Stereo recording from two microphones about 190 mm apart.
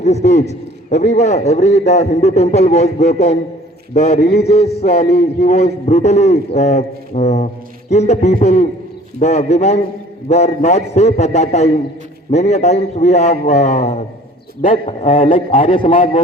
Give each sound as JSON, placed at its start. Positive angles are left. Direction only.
{"t": 0.0, "sound": "a man's voice", "side_deg": 35}
{"t": 4.2, "sound": "a man's voice", "side_deg": 55}
{"t": 4.4, "sound": "a man's voice", "side_deg": 35}